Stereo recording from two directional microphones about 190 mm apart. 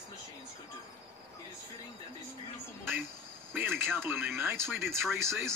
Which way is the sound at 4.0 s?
10° right (ahead or behind).